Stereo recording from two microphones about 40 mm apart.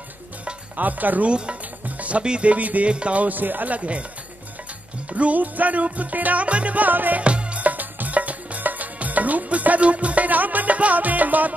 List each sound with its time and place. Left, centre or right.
0.7 s speech: right
1.2 s speech: right
1.9 s music: right
2.2 s speech: right
2.5 s music: right
2.9 s music: right
5.1 s music: right
7.2 s music: right